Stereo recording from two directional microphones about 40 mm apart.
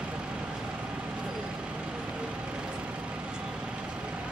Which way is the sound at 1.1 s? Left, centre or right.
Right.